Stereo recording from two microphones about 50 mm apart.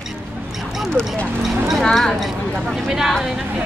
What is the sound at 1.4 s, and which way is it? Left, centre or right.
Speech, centre.